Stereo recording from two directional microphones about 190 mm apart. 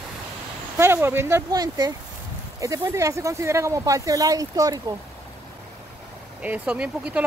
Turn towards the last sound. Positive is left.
turn(degrees=-5)  # may be behind; listen again after turning